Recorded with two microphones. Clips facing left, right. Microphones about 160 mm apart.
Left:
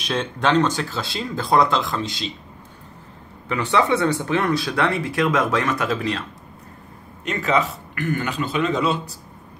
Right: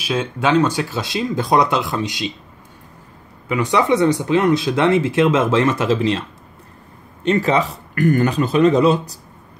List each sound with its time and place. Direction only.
0.0 s speech: 10° right (ahead or behind)
3.4 s speech: 10° right (ahead or behind)
7.2 s a man's voice: 35° right (ahead or behind)